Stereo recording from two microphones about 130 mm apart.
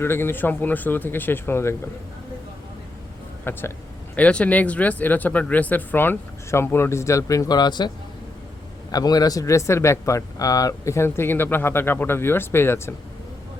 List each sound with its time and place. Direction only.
0.0 s speech: 15° left (ahead or behind)
3.5 s speech: 15° left (ahead or behind)